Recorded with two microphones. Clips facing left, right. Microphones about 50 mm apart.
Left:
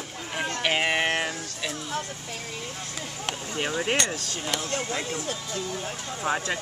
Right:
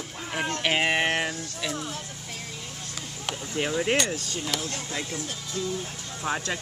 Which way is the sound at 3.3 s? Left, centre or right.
Centre.